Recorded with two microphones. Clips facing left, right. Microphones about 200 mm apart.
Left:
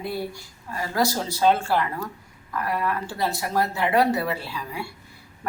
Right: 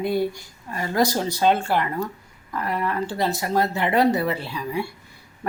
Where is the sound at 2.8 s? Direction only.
20° right (ahead or behind).